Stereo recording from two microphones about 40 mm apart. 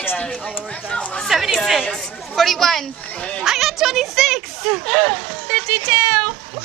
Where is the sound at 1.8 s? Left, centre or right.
Centre.